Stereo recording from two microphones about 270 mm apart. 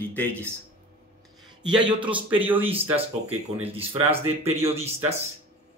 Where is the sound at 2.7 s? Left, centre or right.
Right.